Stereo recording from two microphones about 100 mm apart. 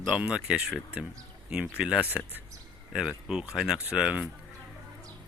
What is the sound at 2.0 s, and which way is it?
Speech, 15° right (ahead or behind).